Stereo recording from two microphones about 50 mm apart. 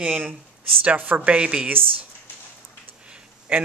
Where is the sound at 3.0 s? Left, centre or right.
Right.